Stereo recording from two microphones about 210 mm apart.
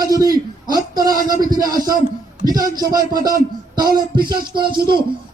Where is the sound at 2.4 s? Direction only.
20° right (ahead or behind).